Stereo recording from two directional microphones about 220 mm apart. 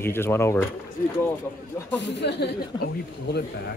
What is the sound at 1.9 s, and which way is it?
Speech, 55° left (ahead or behind).